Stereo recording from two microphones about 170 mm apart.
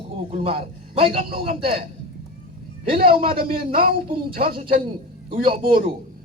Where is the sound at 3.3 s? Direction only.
60° right (ahead or behind).